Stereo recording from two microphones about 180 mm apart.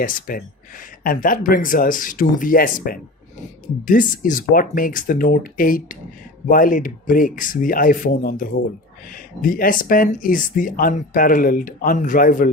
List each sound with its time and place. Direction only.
0.0 s speech: 50° left (ahead or behind)